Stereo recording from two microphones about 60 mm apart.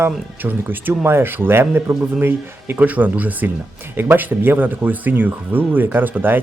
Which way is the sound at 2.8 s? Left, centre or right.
Right.